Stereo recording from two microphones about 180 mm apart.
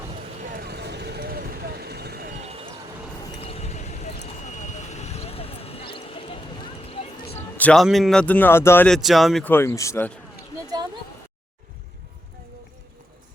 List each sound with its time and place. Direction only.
0.5 s vehicle: 60° right (ahead or behind)
2.4 s basketball bounce: 35° right (ahead or behind)
3.4 s vehicle: 35° left (ahead or behind)
7.6 s speech: 5° left (ahead or behind)
9.0 s speech: centre (ahead or behind)
9.5 s speech: 15° left (ahead or behind)